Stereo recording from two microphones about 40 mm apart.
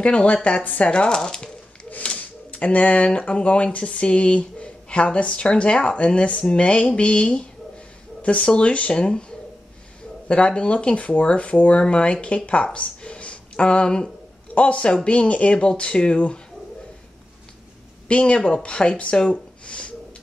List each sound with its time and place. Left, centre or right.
0.0 s speech: left
1.1 s speech: centre
2.1 s speech: left
10.2 s speech: left
12.7 s a sound: left
14.5 s speech: left
18.0 s speech: left
19.6 s a sound: left